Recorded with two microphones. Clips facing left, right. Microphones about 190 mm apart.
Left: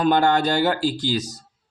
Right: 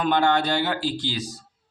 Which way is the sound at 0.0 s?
40° left (ahead or behind).